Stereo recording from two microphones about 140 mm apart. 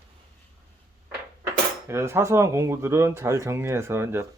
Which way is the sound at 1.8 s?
20° right (ahead or behind).